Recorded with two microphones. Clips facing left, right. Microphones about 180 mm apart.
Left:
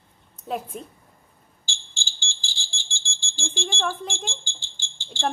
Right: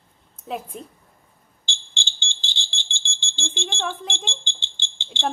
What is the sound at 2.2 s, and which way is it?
Smoke detector, 20° right (ahead or behind).